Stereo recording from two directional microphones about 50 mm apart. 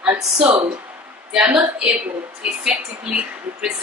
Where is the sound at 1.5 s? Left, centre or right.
Centre.